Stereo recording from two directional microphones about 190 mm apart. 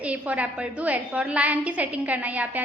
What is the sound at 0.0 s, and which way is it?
A woman's voice, 5° right (ahead or behind).